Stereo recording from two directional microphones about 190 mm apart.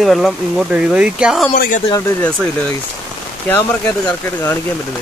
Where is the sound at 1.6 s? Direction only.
45° left (ahead or behind).